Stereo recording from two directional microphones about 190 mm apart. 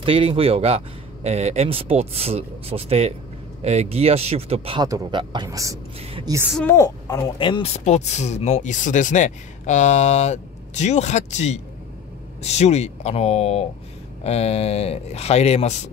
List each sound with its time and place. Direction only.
0.0 s speech: 30° right (ahead or behind)
4.8 s speech: 20° right (ahead or behind)
5.9 s speech: 30° right (ahead or behind)
6.7 s speech: 15° left (ahead or behind); by 15.7 s 35° left (ahead or behind)